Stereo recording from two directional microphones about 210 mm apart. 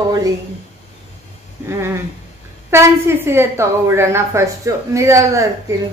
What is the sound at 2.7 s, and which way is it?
A woman's voice, 10° right (ahead or behind).